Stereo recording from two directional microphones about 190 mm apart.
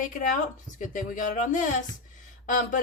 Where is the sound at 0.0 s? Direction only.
40° left (ahead or behind).